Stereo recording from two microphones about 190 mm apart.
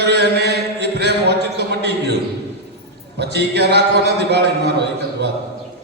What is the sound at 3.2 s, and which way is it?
Speech, 60° right (ahead or behind).